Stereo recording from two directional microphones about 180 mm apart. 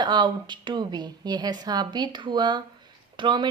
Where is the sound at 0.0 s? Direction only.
25° right (ahead or behind).